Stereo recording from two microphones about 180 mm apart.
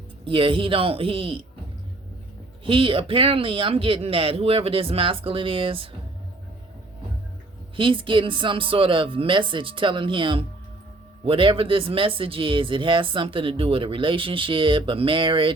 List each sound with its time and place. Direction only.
0.3 s speech: 30° right (ahead or behind)
2.6 s speech: 30° right (ahead or behind)
7.8 s speech: 30° right (ahead or behind)